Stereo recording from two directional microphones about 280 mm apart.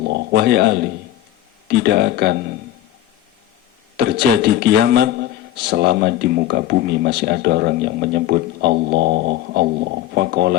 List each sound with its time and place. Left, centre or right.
0.0 s a man's voice: right
3.9 s speech: right